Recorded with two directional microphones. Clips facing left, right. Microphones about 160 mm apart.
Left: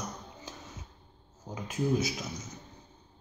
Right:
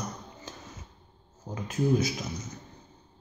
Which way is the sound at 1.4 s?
10° left (ahead or behind).